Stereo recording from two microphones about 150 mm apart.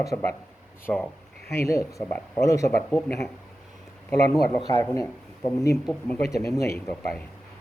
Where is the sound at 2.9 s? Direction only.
5° left (ahead or behind).